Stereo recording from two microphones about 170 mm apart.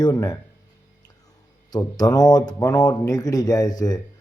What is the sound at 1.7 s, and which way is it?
A man's voice, 20° left (ahead or behind).